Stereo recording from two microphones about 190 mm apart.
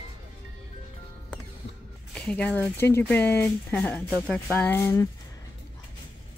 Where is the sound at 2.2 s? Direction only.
5° left (ahead or behind).